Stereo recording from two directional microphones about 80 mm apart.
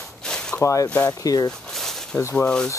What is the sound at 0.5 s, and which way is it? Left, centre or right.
Speech, left.